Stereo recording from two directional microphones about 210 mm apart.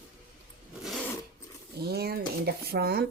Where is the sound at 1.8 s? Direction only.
50° right (ahead or behind).